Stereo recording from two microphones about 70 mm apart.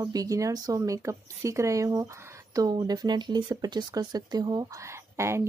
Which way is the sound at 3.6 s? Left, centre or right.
Right.